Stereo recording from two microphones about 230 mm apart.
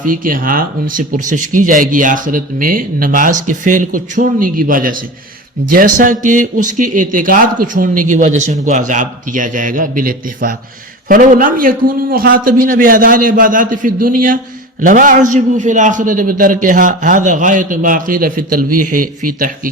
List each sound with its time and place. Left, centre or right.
0.0 s speech: right